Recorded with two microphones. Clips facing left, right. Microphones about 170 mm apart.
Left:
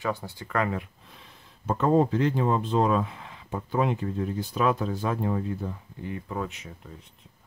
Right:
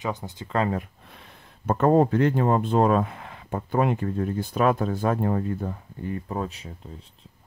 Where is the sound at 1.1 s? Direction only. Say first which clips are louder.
Right 3 dB; 60° right (ahead or behind).